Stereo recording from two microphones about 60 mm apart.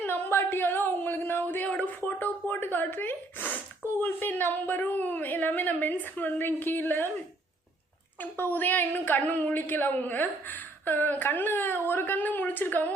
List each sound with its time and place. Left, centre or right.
0.0 s a sound: left
2.0 s a woman's voice: left
8.2 s a woman's voice: left